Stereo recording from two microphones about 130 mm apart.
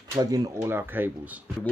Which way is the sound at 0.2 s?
30° right (ahead or behind).